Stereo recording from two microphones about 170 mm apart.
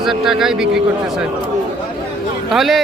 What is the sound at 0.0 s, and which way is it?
Speech, centre (ahead or behind).